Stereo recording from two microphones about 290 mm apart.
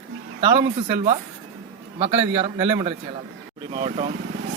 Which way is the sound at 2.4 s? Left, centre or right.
Centre.